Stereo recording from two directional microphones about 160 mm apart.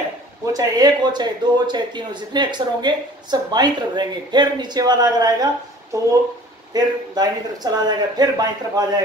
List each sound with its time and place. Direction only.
0.5 s speech: 25° right (ahead or behind)